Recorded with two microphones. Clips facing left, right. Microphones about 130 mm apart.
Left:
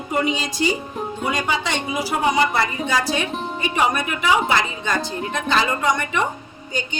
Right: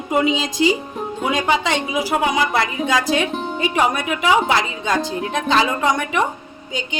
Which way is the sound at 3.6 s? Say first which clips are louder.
Right 2 dB; 90° right.